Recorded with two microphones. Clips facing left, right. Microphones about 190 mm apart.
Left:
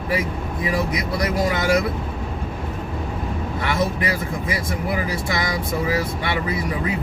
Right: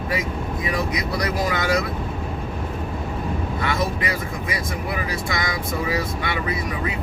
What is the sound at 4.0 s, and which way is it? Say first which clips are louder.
Speech: left 2 dB; 30° left (ahead or behind).